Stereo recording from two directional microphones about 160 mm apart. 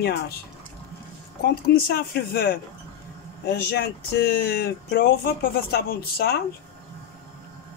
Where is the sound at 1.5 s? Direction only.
75° left (ahead or behind).